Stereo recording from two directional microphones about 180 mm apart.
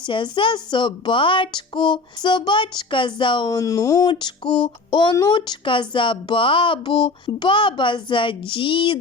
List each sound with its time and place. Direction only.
0.0 s speech: 25° left (ahead or behind)